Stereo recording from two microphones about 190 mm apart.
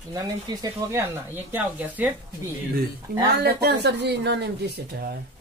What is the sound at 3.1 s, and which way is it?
Speech, 50° right (ahead or behind).